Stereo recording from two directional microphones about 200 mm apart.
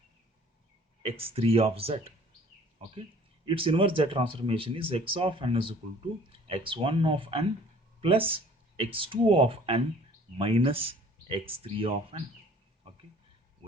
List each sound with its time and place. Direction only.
1.0 s speech: 30° right (ahead or behind)
3.4 s speech: 25° right (ahead or behind)